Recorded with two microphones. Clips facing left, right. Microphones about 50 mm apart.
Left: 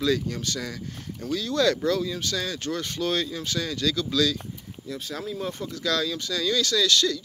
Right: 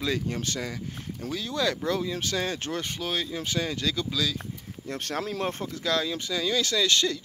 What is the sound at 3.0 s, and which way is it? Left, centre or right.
Speech, centre.